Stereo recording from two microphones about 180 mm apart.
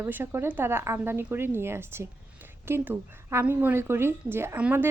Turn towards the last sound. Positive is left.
turn(degrees=-10)  # may be behind; listen again after turning